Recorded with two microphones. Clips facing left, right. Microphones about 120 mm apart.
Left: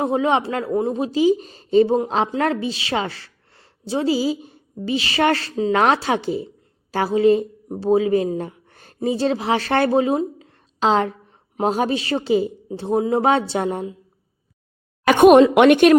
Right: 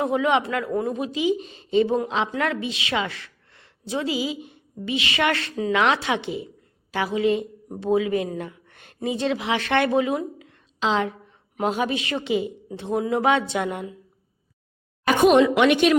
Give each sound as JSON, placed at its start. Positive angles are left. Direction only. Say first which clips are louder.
{"t": 0.0, "sound": "a woman's voice", "louder": "left 2 dB", "side_deg": 30}
{"t": 5.7, "sound": "a woman's voice", "louder": "left 3 dB", "side_deg": 40}
{"t": 10.8, "sound": "a woman's voice", "louder": "left 5 dB", "side_deg": 45}
{"t": 15.1, "sound": "a sound", "louder": "left 5 dB", "side_deg": 85}
{"t": 15.5, "sound": "speech", "louder": "left 6 dB", "side_deg": 50}